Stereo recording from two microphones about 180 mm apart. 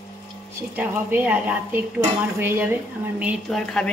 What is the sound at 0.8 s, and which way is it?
A woman's voice, 10° right (ahead or behind).